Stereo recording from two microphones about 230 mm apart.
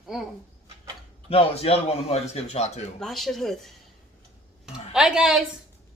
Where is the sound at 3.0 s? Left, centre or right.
Centre.